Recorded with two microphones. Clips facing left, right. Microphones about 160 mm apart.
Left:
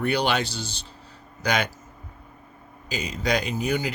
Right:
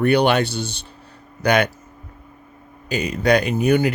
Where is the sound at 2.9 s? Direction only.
60° right (ahead or behind).